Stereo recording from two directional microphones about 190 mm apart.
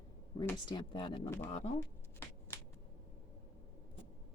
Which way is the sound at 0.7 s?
25° left (ahead or behind).